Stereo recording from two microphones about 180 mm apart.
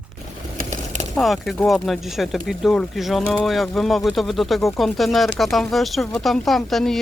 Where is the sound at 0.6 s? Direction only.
40° right (ahead or behind).